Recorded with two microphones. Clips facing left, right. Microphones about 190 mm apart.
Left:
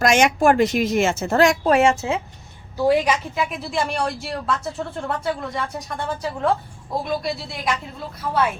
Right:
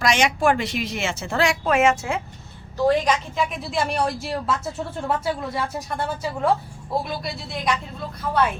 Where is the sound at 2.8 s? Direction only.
10° left (ahead or behind).